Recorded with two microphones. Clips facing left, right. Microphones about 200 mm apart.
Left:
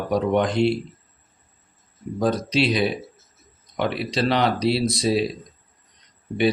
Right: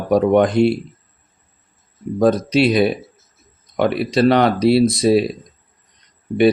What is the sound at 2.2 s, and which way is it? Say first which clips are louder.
Speech: right 7 dB; 55° right (ahead or behind).